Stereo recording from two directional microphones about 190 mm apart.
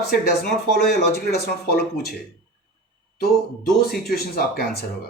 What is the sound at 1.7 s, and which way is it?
Speech, 55° left (ahead or behind).